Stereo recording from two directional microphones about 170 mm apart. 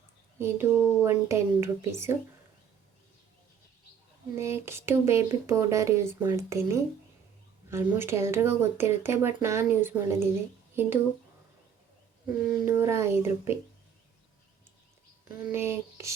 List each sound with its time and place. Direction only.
0.3 s speech: 15° right (ahead or behind)
4.4 s speech: 15° right (ahead or behind)
12.6 s speech: 15° right (ahead or behind)
15.4 s speech: 15° right (ahead or behind)